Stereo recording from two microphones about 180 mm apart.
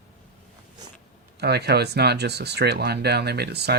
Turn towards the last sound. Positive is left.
turn(degrees=-65)  # may be behind; listen again after turning